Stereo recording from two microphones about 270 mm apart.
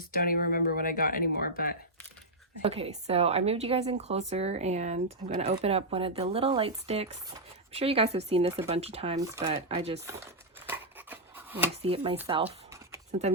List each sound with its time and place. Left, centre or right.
0.1 s speech: left
2.6 s a woman's voice: right
10.7 s scissors: centre
11.8 s a woman's voice: right
12.3 s a sound: centre